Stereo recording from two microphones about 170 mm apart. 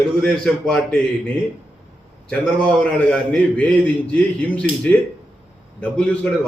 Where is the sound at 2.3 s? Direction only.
5° left (ahead or behind).